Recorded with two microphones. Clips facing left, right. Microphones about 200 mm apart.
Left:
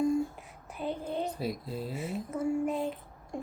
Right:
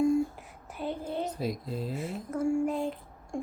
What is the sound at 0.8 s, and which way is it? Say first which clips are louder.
A child's voice: even; centre (ahead or behind).